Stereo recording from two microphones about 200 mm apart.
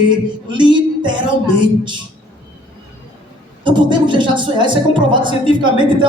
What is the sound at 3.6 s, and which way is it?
A woman's voice, 25° right (ahead or behind).